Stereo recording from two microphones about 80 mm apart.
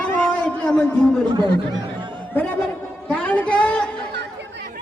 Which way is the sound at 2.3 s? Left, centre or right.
Left.